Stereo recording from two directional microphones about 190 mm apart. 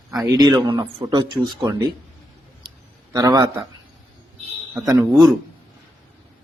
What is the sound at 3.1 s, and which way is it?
Speech, 20° right (ahead or behind).